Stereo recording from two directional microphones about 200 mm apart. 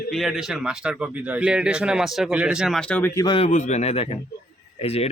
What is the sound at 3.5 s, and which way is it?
A man's voice, 35° left (ahead or behind).